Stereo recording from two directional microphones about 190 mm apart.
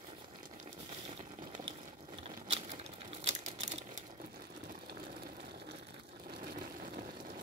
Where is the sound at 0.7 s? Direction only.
30° right (ahead or behind).